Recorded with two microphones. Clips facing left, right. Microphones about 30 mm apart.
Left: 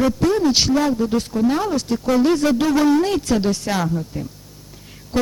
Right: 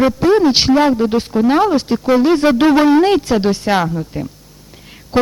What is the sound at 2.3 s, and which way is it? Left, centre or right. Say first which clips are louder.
A man's voice: right 6 dB; right.